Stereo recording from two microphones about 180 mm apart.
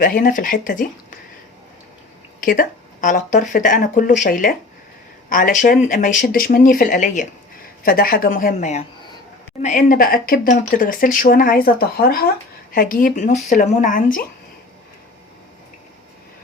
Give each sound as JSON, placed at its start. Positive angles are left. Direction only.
{"t": 0.0, "sound": "speech", "side_deg": 50}
{"t": 2.4, "sound": "speech", "side_deg": 50}
{"t": 7.9, "sound": "speech", "side_deg": 55}